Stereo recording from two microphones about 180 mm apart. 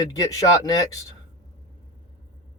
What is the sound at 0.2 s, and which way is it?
Speech, 20° left (ahead or behind).